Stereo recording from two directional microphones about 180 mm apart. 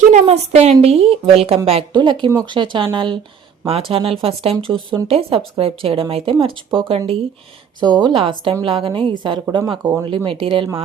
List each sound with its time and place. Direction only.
0.0 s a woman's voice: 40° right (ahead or behind)